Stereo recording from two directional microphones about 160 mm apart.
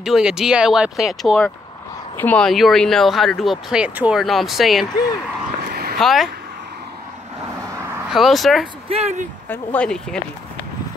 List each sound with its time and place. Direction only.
0.0 s speech: 5° right (ahead or behind)
5.7 s a sound: 75° right (ahead or behind)
5.9 s speech: centre (ahead or behind)
8.1 s speech: centre (ahead or behind)
8.8 s speech: 40° right (ahead or behind)
9.5 s speech: 10° left (ahead or behind)